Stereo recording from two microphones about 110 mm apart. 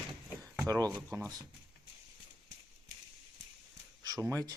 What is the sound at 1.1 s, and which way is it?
Speech, 30° right (ahead or behind).